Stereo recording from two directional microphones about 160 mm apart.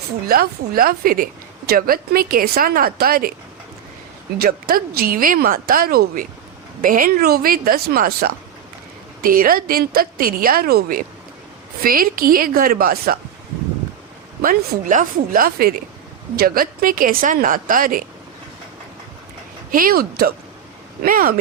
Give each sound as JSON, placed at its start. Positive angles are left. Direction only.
{"t": 0.3, "sound": "a woman's voice", "side_deg": -65}
{"t": 4.4, "sound": "a woman's voice", "side_deg": -65}
{"t": 14.4, "sound": "a woman's voice", "side_deg": -60}
{"t": 19.7, "sound": "a woman's voice", "side_deg": -65}